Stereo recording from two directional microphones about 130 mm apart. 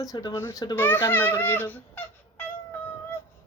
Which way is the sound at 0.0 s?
30° left (ahead or behind).